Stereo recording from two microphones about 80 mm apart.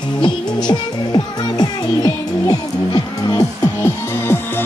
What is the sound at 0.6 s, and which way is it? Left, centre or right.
Music, left.